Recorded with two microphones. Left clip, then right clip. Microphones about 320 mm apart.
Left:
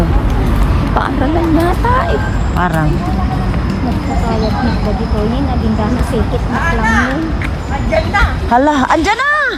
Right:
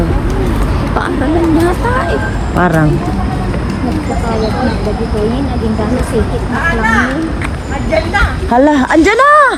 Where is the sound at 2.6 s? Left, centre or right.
Centre.